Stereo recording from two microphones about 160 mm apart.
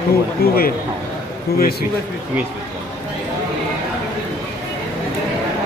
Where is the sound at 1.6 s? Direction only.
80° left.